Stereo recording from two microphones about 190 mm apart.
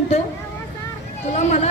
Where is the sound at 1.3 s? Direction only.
35° left (ahead or behind).